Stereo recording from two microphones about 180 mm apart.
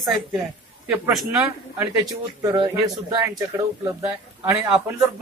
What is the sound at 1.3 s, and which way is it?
A man's voice, 15° right (ahead or behind).